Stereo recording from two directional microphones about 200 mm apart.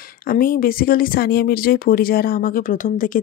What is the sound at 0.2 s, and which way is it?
Speech, 45° left (ahead or behind).